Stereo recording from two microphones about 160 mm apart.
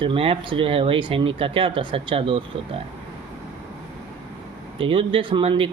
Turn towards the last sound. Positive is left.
turn(degrees=-30)  # may be behind; listen again after turning